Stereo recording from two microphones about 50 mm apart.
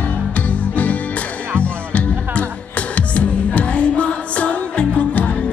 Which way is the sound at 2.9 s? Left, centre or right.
Left.